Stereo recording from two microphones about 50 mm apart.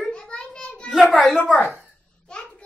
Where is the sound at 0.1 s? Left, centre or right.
Centre.